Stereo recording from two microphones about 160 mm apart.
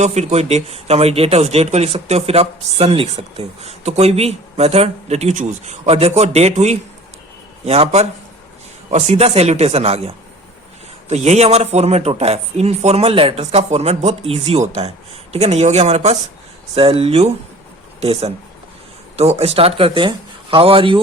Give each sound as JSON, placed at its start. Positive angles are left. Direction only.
{"t": 0.0, "sound": "speech", "side_deg": -45}
{"t": 11.1, "sound": "speech", "side_deg": -45}